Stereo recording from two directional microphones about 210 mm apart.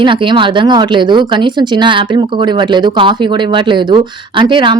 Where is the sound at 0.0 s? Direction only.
25° right (ahead or behind).